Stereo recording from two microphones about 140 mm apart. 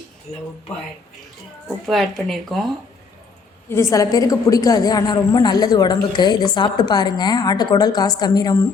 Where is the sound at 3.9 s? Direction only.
25° left (ahead or behind).